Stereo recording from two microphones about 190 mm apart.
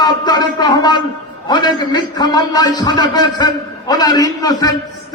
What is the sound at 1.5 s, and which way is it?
A man's voice, 25° left (ahead or behind).